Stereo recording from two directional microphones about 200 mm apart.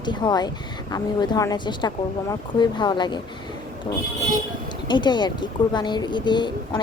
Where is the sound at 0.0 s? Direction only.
20° left (ahead or behind).